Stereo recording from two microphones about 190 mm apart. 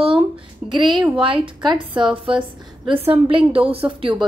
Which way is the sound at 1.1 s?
25° right (ahead or behind).